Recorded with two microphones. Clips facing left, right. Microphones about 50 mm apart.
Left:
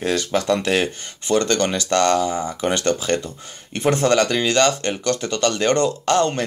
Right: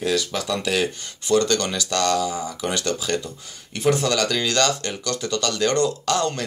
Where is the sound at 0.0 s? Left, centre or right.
Left.